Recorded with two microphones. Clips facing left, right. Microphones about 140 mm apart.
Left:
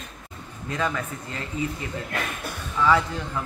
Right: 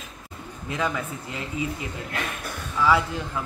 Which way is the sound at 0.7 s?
10° right (ahead or behind).